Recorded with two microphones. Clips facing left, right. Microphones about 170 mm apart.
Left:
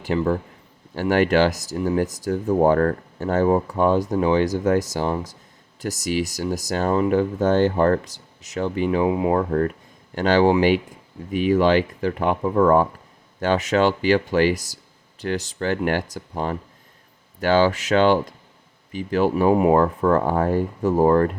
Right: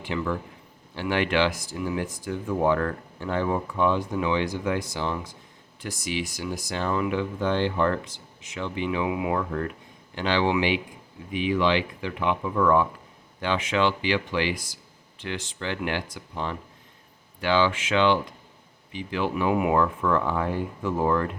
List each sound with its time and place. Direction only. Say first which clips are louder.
0.0 s speech: left 7 dB; 40° left (ahead or behind)